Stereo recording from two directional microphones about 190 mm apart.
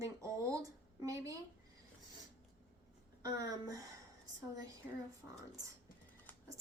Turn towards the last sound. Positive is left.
turn(degrees=10)  # may be behind; listen again after turning